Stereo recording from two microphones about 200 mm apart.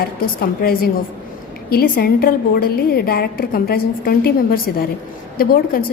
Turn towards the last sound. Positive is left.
turn(degrees=45)  # may be behind; listen again after turning